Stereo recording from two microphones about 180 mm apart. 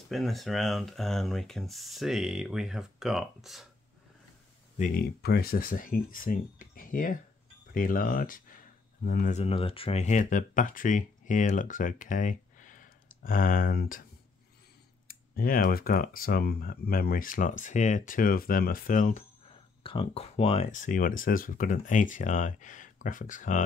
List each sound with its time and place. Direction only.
0.1 s speech: centre (ahead or behind)
4.7 s speech: 50° left (ahead or behind)
9.4 s speech: 30° left (ahead or behind); by 14.0 s 50° left (ahead or behind)
15.0 s speech: 55° left (ahead or behind)
19.8 s speech: 30° left (ahead or behind); by 23.6 s 45° left (ahead or behind)